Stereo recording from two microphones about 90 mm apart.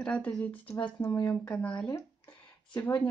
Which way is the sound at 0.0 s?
10° left (ahead or behind).